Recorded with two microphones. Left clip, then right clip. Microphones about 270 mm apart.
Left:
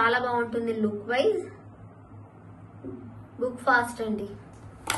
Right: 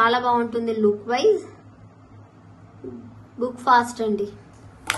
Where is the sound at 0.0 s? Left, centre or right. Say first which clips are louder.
Right 5 dB; centre.